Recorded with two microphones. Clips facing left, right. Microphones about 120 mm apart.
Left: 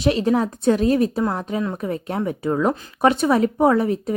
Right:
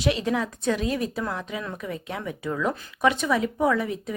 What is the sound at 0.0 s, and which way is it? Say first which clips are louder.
A woman's voice: left 6 dB; 35° left (ahead or behind).